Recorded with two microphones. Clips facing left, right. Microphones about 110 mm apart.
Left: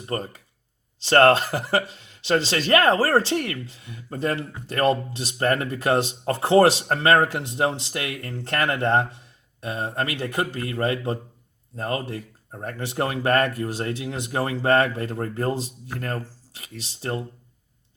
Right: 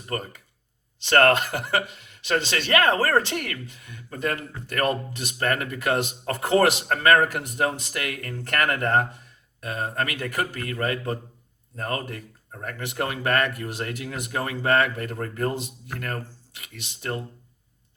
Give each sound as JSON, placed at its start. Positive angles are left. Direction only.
{"t": 0.0, "sound": "speech", "side_deg": 30}